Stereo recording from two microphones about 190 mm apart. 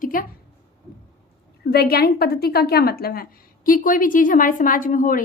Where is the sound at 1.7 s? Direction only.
55° left (ahead or behind).